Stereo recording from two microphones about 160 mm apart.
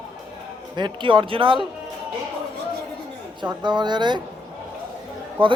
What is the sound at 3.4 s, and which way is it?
Speech, 30° right (ahead or behind).